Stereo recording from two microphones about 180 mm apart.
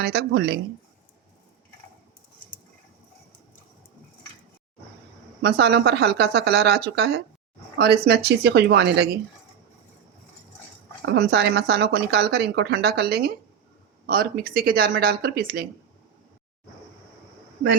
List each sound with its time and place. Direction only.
0.0 s a woman's voice: 70° right (ahead or behind)
5.4 s a woman's voice: 65° right (ahead or behind)
11.0 s a woman's voice: 70° right (ahead or behind)